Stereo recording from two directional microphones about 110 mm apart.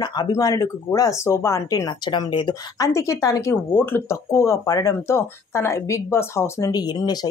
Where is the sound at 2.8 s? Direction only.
30° left (ahead or behind).